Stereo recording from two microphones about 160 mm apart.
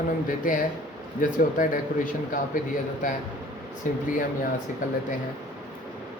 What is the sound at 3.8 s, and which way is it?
Speech, 55° left (ahead or behind).